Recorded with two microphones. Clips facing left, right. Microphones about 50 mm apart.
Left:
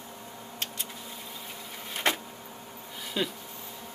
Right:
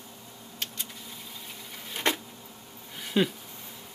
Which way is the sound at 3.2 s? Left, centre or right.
Centre.